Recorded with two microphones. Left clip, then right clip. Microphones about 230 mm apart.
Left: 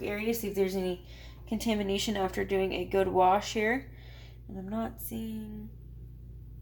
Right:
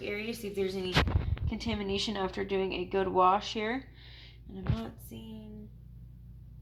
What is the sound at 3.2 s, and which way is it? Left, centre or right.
Speech, right.